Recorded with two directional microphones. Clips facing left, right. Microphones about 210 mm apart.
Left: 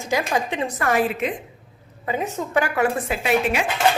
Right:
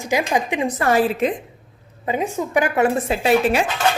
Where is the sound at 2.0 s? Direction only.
15° right (ahead or behind); by 3.6 s 35° right (ahead or behind).